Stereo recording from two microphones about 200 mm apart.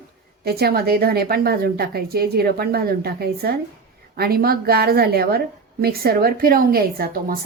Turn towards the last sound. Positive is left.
turn(degrees=-45)  # may be behind; listen again after turning